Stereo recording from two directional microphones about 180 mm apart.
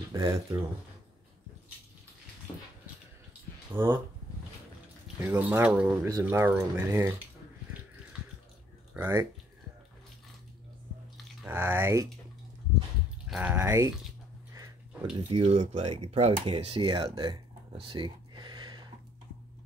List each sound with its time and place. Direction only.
0.1 s speech: 20° right (ahead or behind)
3.7 s speech: 10° right (ahead or behind)
5.3 s speech: 10° right (ahead or behind)
8.9 s speech: 10° right (ahead or behind)
11.4 s speech: 10° right (ahead or behind)
13.3 s speech: 10° right (ahead or behind)
15.1 s speech: 30° right (ahead or behind)
17.7 s a sound: 25° right (ahead or behind)